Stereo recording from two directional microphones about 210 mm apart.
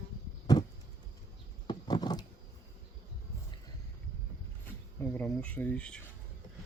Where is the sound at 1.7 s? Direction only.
20° left (ahead or behind).